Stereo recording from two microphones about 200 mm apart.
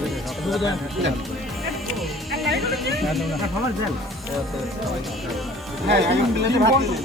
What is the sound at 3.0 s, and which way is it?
Speech, centre (ahead or behind).